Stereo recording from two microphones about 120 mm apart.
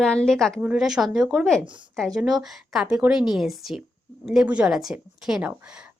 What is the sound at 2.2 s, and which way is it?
A woman's voice, 5° right (ahead or behind).